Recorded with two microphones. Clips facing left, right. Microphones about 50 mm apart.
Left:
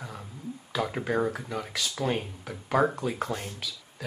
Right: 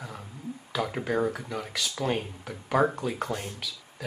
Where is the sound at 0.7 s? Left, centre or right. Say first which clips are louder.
Even; centre.